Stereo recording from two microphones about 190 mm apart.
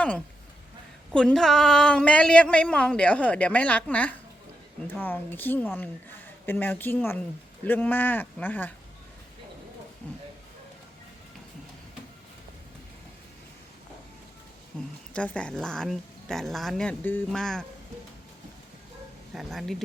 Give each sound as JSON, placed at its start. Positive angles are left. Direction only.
{"t": 1.1, "sound": "a woman's voice", "side_deg": 5}
{"t": 15.1, "sound": "speech", "side_deg": 5}
{"t": 19.3, "sound": "speech", "side_deg": 0}